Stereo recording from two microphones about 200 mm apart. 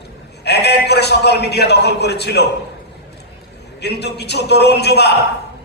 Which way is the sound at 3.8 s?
55° left (ahead or behind).